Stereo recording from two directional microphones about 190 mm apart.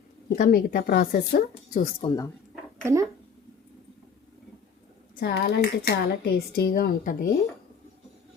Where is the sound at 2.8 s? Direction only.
15° right (ahead or behind).